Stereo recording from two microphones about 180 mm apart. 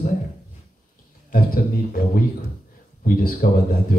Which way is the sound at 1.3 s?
50° left (ahead or behind).